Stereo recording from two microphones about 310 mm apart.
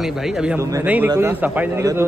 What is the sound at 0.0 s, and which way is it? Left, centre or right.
A man's voice, centre.